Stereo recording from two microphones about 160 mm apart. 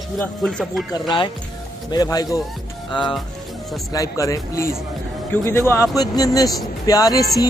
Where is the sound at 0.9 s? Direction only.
30° left (ahead or behind).